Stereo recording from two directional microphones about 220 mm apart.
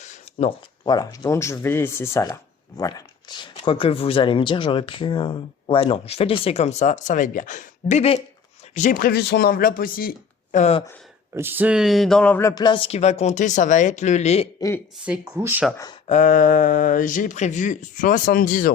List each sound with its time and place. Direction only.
0.0 s a sound: 30° left (ahead or behind)
0.9 s speech: 20° left (ahead or behind)
11.3 s speech: 10° right (ahead or behind); by 14.4 s 30° left (ahead or behind)
15.0 s speech: 10° right (ahead or behind)
16.0 s speech: 35° left (ahead or behind)